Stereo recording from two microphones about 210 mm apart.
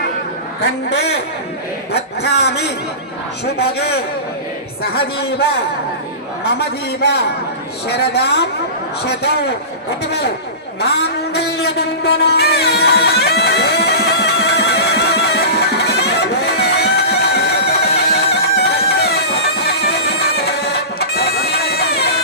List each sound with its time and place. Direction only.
0.9 s a man's voice: 55° left (ahead or behind)
6.4 s a man's voice: 50° left (ahead or behind)
11.3 s music: 50° left (ahead or behind)
21.0 s bagpipes: 50° left (ahead or behind)